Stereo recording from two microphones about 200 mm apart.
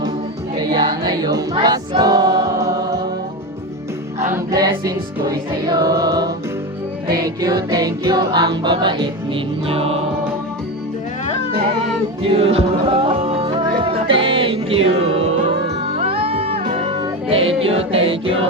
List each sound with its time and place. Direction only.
0.5 s choir: 20° right (ahead or behind)
4.5 s music: 20° right (ahead or behind)
7.7 s music: 15° right (ahead or behind)
12.2 s music: 30° right (ahead or behind)